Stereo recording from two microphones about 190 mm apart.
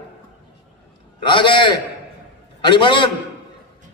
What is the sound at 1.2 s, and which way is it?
A man's voice, 25° left (ahead or behind).